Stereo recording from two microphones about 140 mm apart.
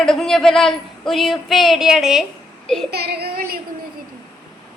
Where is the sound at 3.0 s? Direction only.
90° right.